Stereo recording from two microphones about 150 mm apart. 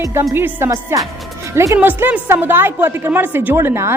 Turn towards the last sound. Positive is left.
turn(degrees=-15)  # may be behind; listen again after turning